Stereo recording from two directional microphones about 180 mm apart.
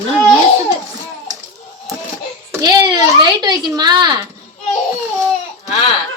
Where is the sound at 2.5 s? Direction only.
20° right (ahead or behind).